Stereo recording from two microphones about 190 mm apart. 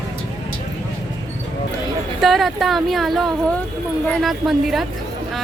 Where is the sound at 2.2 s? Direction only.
Centre (ahead or behind).